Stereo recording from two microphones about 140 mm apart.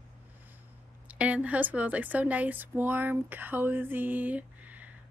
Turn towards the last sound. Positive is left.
turn(degrees=-10)  # may be behind; listen again after turning